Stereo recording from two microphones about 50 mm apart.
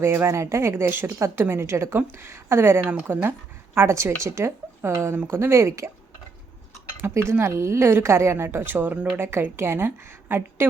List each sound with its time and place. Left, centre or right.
0.0 s a woman's voice: right
0.3 s a woman's voice: right
0.9 s a woman's voice: right
3.8 s a woman's voice: right
7.0 s a woman's voice: right